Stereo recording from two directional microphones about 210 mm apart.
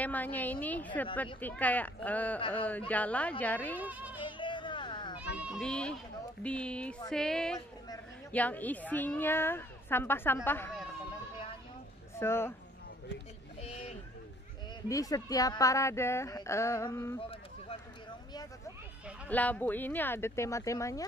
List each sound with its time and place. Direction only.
0.0 s a woman's voice: 10° left (ahead or behind)
3.8 s speech: 5° right (ahead or behind)
4.2 s children playing: 25° left (ahead or behind)
5.4 s a woman's voice: centre (ahead or behind)
12.2 s a woman's voice: 10° left (ahead or behind)
13.6 s hubbub: 30° left (ahead or behind)
14.9 s a woman's voice: 15° left (ahead or behind)
19.2 s a woman's voice: 5° left (ahead or behind)